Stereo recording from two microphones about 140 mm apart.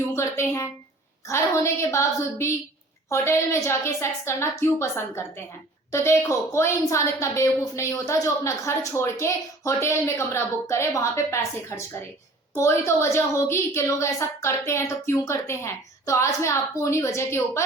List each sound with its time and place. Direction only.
0.2 s a woman's voice: 20° left (ahead or behind)